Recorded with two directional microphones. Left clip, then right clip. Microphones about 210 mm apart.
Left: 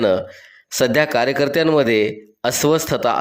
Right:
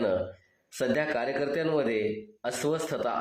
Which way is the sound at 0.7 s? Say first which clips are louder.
Left 12 dB; 40° left (ahead or behind).